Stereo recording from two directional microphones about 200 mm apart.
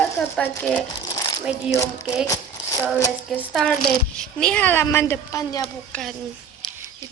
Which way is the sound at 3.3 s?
Centre (ahead or behind).